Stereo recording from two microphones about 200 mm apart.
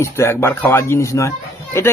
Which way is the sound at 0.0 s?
15° left (ahead or behind).